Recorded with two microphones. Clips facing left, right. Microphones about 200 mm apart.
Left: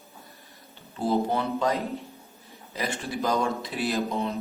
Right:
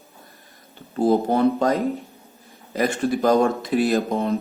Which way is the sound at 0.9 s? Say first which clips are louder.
Right 7 dB; 45° right (ahead or behind).